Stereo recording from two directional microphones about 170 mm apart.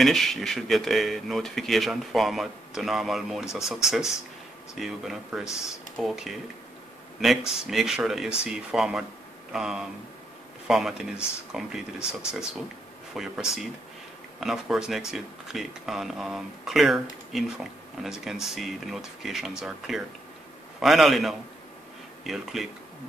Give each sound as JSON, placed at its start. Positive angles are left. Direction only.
{"t": 0.0, "sound": "speech", "side_deg": 0}